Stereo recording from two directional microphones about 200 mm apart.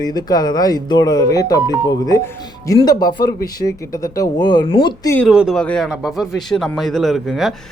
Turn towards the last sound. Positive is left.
turn(degrees=0)  # may be behind; listen again after turning